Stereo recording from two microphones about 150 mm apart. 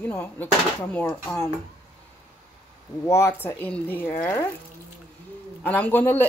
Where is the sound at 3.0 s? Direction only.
20° left (ahead or behind).